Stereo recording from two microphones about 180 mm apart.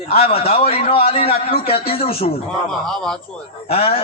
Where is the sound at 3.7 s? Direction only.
35° left (ahead or behind).